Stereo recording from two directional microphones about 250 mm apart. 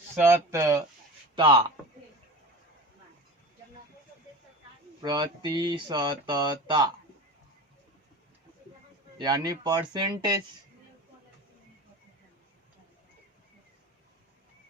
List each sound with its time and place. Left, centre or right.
0.2 s a man's voice: centre
5.0 s speech: centre
9.1 s speech: centre